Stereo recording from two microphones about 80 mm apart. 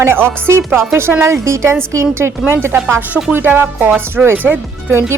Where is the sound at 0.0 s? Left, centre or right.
Right.